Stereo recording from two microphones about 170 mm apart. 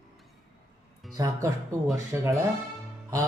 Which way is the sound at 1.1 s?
20° right (ahead or behind).